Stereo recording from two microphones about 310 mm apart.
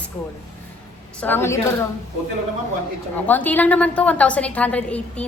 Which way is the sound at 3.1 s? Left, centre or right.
Centre.